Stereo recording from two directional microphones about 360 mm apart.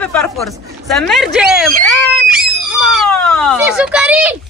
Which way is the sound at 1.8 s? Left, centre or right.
Centre.